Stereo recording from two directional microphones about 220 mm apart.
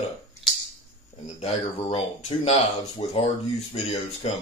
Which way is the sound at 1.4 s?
25° left (ahead or behind).